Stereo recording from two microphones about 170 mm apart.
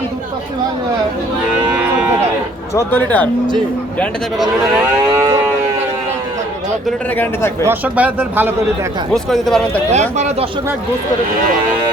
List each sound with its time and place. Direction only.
2.7 s speech: 10° left (ahead or behind)
4.8 s moo: 20° right (ahead or behind)
7.6 s speech: 10° right (ahead or behind)
9.1 s speech: centre (ahead or behind)
9.9 s speech: 40° right (ahead or behind)